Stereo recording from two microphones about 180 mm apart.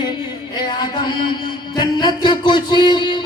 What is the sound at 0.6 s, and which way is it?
Music, 25° left (ahead or behind).